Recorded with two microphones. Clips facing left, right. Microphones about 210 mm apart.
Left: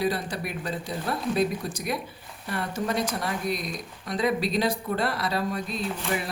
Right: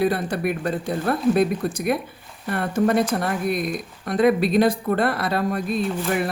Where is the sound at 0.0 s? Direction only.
55° right (ahead or behind).